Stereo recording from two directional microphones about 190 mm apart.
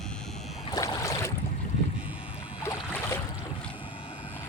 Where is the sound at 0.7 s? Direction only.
20° left (ahead or behind).